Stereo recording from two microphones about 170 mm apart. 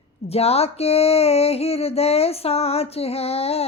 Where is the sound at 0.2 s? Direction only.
35° left (ahead or behind).